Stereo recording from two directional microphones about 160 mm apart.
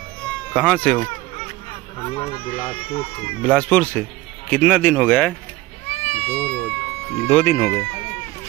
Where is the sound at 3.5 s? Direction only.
10° left (ahead or behind).